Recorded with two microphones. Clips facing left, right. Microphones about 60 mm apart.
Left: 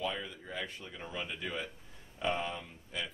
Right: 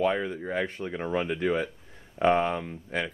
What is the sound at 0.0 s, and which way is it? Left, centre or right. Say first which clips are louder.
Speech: right 11 dB; right.